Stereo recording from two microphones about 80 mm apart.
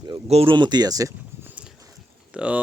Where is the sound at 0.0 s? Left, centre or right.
Right.